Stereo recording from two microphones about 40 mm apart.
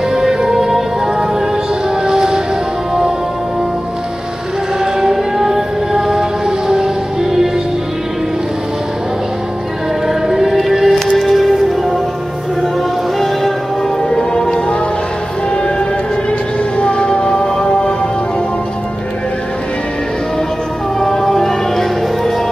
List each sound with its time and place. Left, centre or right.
0.1 s music: centre
2.0 s music: centre
5.0 s a sound: centre
10.0 s music: centre
14.1 s music: centre
16.7 s music: left
21.0 s music: centre